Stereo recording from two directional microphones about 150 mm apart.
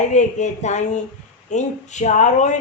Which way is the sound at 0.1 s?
50° left (ahead or behind).